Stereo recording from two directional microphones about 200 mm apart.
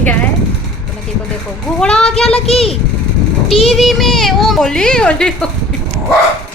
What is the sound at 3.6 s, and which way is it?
A child's voice, centre (ahead or behind).